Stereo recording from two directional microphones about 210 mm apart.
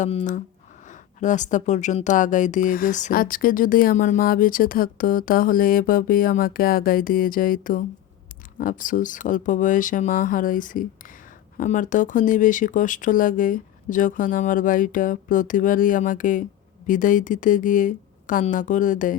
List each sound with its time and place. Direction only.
0.0 s speech: 35° left (ahead or behind)